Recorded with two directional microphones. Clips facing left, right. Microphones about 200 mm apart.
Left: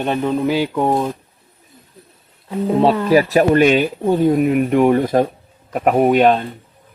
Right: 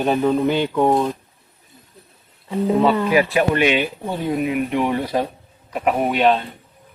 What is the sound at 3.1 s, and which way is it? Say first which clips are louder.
Speech: left 5 dB; 40° left (ahead or behind).